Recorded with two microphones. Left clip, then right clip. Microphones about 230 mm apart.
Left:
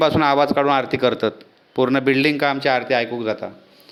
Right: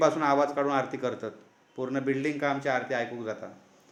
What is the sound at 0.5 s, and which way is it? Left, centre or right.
Speech, left.